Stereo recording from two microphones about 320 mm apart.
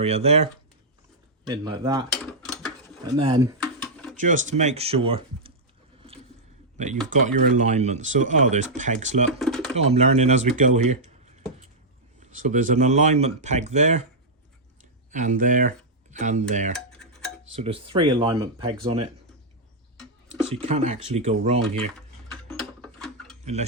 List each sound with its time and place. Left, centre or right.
0.0 s speech: centre
1.5 s speech: centre
3.1 s speech: centre
3.6 s a sound: centre
4.2 s speech: right
6.7 s speech: right
9.4 s pigeon: centre
9.7 s speech: centre
12.2 s speech: right
15.1 s speech: right
16.7 s a sound: centre
17.5 s speech: centre
20.5 s speech: right
22.3 s tick-tock: centre